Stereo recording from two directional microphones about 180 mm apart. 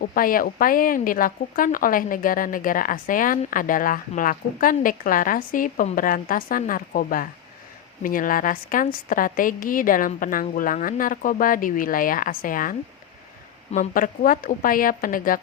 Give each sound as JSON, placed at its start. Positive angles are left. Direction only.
{"t": 0.0, "sound": "speech", "side_deg": 50}
{"t": 13.7, "sound": "speech", "side_deg": 50}